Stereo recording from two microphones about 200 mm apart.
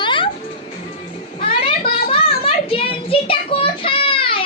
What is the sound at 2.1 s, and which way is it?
Child singing, 25° left (ahead or behind).